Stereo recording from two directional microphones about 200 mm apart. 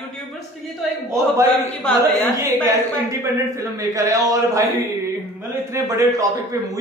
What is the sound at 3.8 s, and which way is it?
Speech, 15° right (ahead or behind).